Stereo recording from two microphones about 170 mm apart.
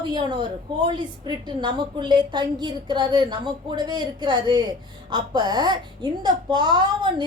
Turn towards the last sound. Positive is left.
turn(degrees=-25)  # may be behind; listen again after turning